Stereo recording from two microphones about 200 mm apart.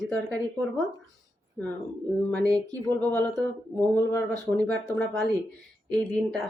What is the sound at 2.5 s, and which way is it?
Speech, 20° right (ahead or behind).